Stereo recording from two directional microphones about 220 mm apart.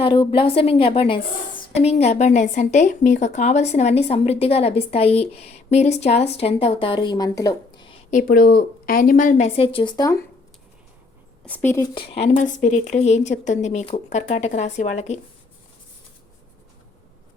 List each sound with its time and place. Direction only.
0.0 s a woman's voice: 20° left (ahead or behind)
8.1 s a woman's voice: 40° left (ahead or behind); by 10.2 s 15° left (ahead or behind)
11.4 s a woman's voice: 10° left (ahead or behind)
11.9 s a woman's voice: 25° left (ahead or behind)